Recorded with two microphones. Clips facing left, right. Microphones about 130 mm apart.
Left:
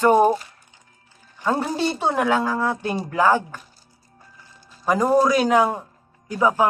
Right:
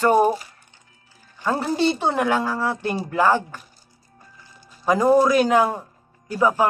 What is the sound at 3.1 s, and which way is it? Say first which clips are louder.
Speech: even; 10° left (ahead or behind).